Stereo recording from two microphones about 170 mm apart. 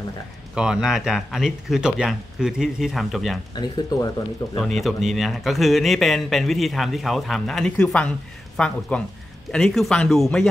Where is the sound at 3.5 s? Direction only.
25° left (ahead or behind).